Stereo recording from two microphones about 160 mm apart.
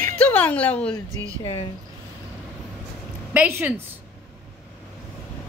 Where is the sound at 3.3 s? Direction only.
10° right (ahead or behind).